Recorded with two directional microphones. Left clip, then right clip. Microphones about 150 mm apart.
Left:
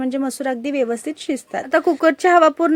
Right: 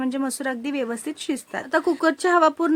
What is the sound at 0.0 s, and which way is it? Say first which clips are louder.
Speech: left 4 dB; 15° left (ahead or behind).